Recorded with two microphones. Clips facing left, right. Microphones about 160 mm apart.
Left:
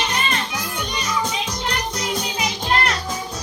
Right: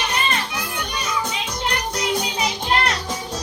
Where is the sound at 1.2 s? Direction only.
65° right (ahead or behind).